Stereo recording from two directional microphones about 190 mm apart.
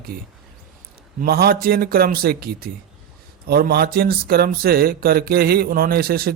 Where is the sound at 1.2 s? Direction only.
55° right (ahead or behind).